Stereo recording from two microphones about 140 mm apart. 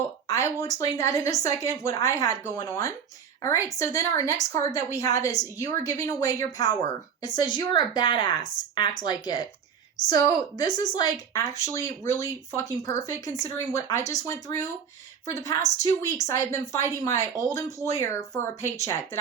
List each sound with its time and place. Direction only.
0.3 s speech: 20° left (ahead or behind)